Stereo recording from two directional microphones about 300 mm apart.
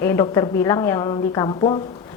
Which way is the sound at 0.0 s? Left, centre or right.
Centre.